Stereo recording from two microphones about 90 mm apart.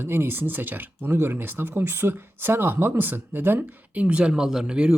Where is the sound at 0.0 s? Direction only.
25° right (ahead or behind).